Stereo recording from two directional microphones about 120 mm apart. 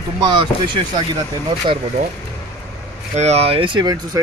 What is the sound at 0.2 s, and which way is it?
Speech, 35° right (ahead or behind).